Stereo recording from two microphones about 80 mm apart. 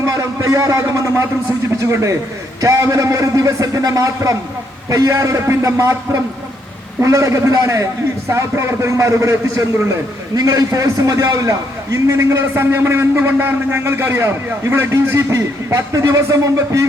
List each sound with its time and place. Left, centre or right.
0.0 s a man's voice: right
7.0 s a man's voice: right